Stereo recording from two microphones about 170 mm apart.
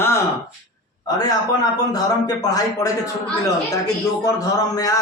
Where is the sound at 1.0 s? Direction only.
20° left (ahead or behind).